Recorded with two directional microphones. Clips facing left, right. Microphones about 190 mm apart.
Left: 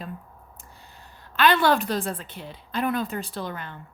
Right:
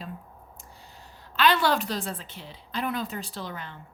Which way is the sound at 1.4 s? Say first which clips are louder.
Left 3 dB; 50° left (ahead or behind).